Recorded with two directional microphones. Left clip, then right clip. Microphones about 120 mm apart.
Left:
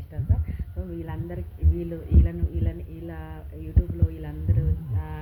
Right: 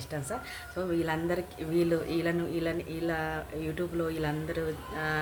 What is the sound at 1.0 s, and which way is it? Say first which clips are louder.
A man's voice: right 7 dB; 30° right (ahead or behind).